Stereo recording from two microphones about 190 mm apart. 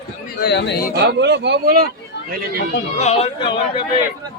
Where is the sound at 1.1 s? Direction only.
65° right (ahead or behind).